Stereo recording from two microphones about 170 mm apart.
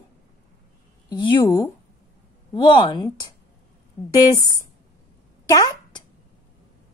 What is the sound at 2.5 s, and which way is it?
Speech, 30° left (ahead or behind).